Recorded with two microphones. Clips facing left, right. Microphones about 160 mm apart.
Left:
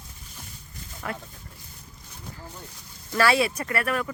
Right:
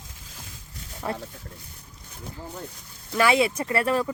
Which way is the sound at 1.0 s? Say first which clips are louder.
Right 4 dB; 25° right (ahead or behind).